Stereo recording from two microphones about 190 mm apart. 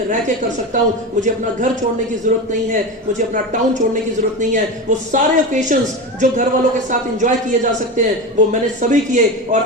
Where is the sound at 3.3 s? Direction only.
40° right (ahead or behind).